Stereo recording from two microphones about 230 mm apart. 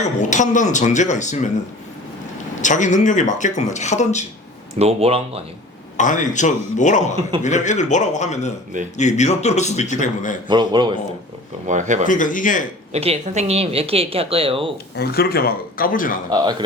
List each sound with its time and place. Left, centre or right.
0.0 s speech: left
2.6 s speech: left
4.8 s a woman's voice: right
6.0 s speech: left
10.5 s a woman's voice: centre
11.6 s speech: right
12.0 s speech: left
12.9 s a woman's voice: right
14.9 s speech: left
16.3 s a man's voice: centre